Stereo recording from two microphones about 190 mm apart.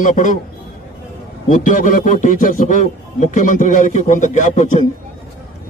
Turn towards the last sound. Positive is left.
turn(degrees=40)  # may be behind; listen again after turning